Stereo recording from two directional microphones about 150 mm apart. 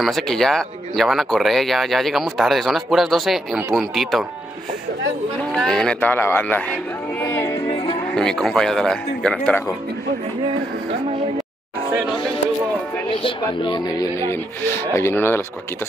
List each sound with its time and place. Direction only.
0.0 s speech: centre (ahead or behind)
5.4 s a man's voice: 5° left (ahead or behind)
7.6 s music: 35° left (ahead or behind)
8.1 s speech: 5° left (ahead or behind)
13.2 s speech: 35° left (ahead or behind); by 15.4 s 15° left (ahead or behind)